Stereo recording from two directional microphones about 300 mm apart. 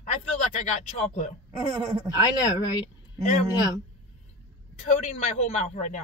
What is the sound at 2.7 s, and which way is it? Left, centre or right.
Speech, centre.